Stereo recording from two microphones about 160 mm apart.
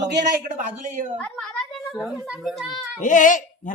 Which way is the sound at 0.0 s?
90° right.